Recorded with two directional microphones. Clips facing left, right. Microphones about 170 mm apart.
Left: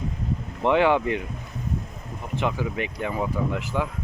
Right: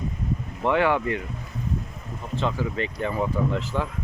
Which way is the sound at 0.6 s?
20° left (ahead or behind).